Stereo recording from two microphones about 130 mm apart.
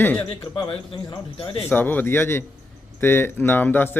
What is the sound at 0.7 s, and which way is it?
Speech, 45° left (ahead or behind).